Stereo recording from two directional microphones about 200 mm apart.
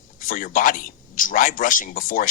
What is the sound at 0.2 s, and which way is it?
Speech, 40° left (ahead or behind).